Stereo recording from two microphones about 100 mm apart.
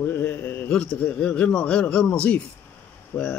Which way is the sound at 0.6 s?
10° left (ahead or behind).